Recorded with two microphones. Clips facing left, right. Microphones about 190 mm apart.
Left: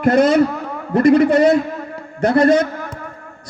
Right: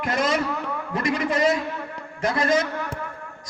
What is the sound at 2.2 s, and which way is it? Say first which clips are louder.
Speech: left 10 dB; 60° left (ahead or behind).